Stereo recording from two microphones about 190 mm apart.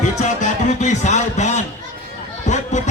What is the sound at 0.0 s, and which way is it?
Music, 40° left (ahead or behind).